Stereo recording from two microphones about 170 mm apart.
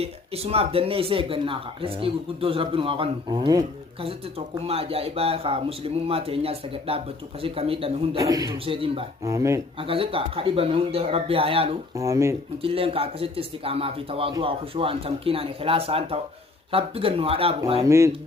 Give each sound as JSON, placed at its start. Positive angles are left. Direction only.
{"t": 0.0, "sound": "speech", "side_deg": -35}
{"t": 4.0, "sound": "speech", "side_deg": -35}
{"t": 8.2, "sound": "a man's voice", "side_deg": -20}
{"t": 8.6, "sound": "speech", "side_deg": -30}
{"t": 9.2, "sound": "speech", "side_deg": -20}
{"t": 9.8, "sound": "speech", "side_deg": -35}
{"t": 11.9, "sound": "speech", "side_deg": -20}
{"t": 12.6, "sound": "speech", "side_deg": -35}
{"t": 17.8, "sound": "speech", "side_deg": -15}